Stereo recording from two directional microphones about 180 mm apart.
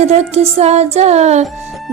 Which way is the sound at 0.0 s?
35° right (ahead or behind).